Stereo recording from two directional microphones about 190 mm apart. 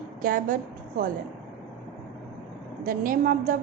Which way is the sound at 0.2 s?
45° right (ahead or behind).